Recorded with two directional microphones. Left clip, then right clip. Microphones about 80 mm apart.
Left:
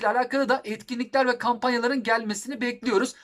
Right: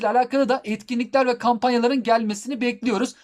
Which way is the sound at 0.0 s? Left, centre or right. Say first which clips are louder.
Right 4 dB; right.